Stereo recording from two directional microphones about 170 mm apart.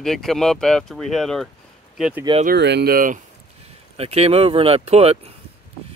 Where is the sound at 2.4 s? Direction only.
80° right; by 3.2 s 55° right (ahead or behind).